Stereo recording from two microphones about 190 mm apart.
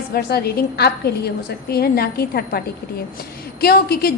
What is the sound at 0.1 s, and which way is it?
A woman's voice, 55° left (ahead or behind).